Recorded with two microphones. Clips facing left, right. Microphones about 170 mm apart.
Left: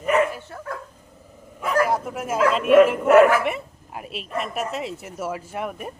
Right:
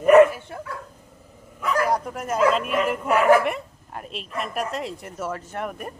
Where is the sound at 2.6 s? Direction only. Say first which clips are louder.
Left 10 dB; 60° left (ahead or behind).